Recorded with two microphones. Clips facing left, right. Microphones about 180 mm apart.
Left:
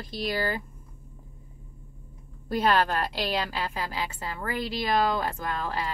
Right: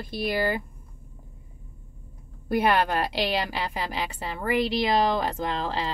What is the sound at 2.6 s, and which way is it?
Speech, 15° right (ahead or behind).